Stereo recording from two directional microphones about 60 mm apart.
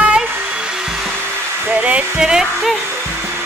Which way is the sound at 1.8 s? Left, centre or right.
Centre.